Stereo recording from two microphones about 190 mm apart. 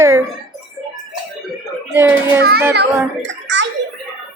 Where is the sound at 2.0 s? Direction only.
10° right (ahead or behind).